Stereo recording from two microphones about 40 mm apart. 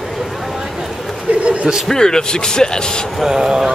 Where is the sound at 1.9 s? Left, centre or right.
Centre.